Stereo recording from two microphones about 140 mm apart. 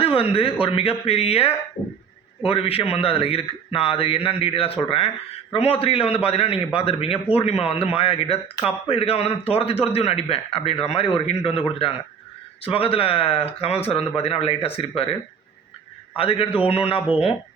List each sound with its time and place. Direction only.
0.0 s a man's voice: 40° left (ahead or behind)
16.1 s a man's voice: 40° left (ahead or behind)